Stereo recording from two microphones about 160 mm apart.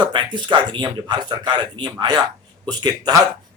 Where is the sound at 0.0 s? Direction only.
30° right (ahead or behind).